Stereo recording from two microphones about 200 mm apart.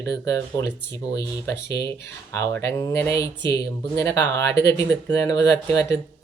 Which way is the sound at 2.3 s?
15° left (ahead or behind).